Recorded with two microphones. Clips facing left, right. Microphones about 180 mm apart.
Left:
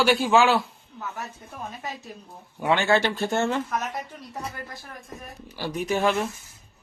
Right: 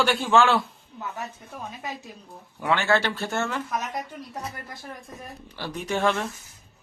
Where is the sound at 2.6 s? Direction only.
20° left (ahead or behind).